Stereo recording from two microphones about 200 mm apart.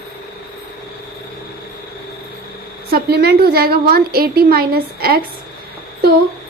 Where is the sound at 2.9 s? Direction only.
50° right (ahead or behind).